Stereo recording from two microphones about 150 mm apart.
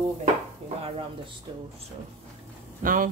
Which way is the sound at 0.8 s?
40° right (ahead or behind).